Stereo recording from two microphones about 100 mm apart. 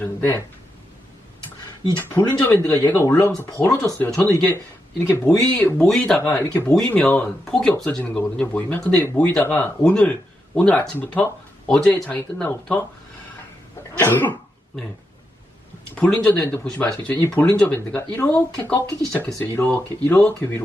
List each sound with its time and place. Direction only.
0.0 s speech: 25° left (ahead or behind)
2.0 s speech: 20° left (ahead or behind)
4.1 s speech: 5° left (ahead or behind)
4.4 s speech: 25° left (ahead or behind)
5.3 s speech: 5° left (ahead or behind)
6.1 s speech: 25° left (ahead or behind)
6.7 s speech: 10° left (ahead or behind)
14.0 s speech: 20° left (ahead or behind)
16.0 s speech: 10° left (ahead or behind)